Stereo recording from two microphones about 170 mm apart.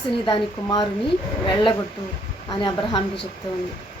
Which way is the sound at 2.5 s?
30° left (ahead or behind).